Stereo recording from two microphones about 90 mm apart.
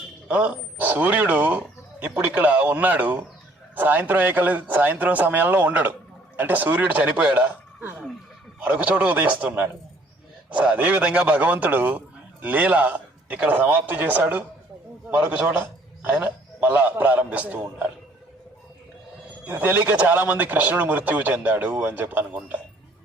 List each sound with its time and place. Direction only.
0.3 s a man's voice: 15° right (ahead or behind)
19.5 s a man's voice: 20° right (ahead or behind)